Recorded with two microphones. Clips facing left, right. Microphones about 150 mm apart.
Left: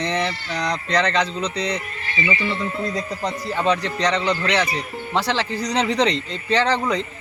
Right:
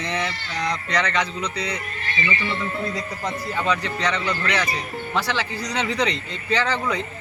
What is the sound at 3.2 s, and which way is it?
Speech, 35° left (ahead or behind).